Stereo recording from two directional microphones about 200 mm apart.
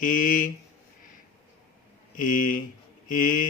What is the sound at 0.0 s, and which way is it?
Mantra, 40° left (ahead or behind).